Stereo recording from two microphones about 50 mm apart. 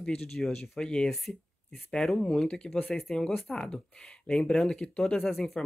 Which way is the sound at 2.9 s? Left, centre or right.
Centre.